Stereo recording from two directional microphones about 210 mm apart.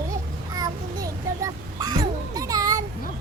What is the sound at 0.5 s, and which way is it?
A child's voice, 15° right (ahead or behind).